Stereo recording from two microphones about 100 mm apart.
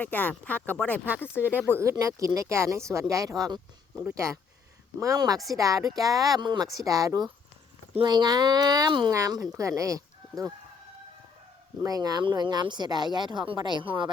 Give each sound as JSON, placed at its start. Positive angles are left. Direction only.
{"t": 0.0, "sound": "speech", "side_deg": 15}
{"t": 1.5, "sound": "speech", "side_deg": -20}
{"t": 1.8, "sound": "speech", "side_deg": -30}
{"t": 6.4, "sound": "speech", "side_deg": -50}
{"t": 6.7, "sound": "speech", "side_deg": -35}
{"t": 11.8, "sound": "speech", "side_deg": -40}